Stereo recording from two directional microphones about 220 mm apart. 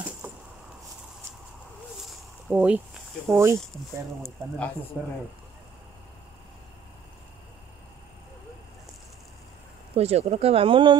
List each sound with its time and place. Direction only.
0.2 s a sound: 10° right (ahead or behind)
2.5 s speech: 5° right (ahead or behind)
3.5 s speech: centre (ahead or behind)
9.9 s speech: 30° right (ahead or behind)